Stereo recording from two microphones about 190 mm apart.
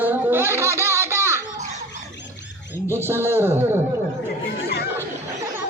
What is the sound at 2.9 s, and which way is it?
Speech, 10° right (ahead or behind).